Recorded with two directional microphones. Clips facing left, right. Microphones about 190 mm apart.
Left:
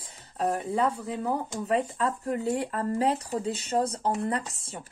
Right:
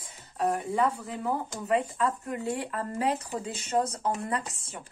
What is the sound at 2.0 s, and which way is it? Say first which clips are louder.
Speech: left 1 dB; 35° left (ahead or behind).